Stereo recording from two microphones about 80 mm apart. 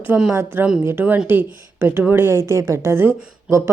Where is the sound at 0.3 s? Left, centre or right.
Right.